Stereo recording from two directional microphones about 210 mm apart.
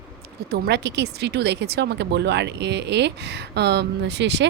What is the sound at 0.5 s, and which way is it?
Speech, 50° right (ahead or behind).